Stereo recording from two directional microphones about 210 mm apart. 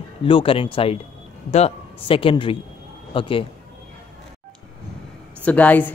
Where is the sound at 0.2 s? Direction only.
25° left (ahead or behind).